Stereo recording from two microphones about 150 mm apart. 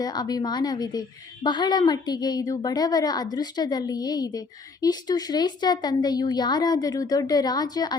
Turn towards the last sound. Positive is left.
turn(degrees=25)  # may be behind; listen again after turning